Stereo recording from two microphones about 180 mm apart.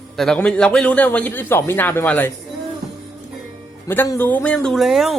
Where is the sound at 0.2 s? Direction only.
5° left (ahead or behind).